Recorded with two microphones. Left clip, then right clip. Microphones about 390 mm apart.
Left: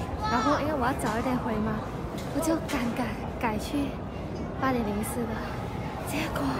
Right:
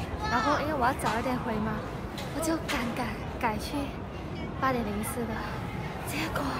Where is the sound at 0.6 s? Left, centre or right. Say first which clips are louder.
Even; centre.